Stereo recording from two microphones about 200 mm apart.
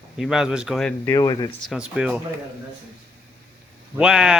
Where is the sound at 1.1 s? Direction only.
20° left (ahead or behind).